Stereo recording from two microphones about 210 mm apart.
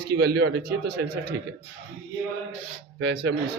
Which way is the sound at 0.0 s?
50° right (ahead or behind).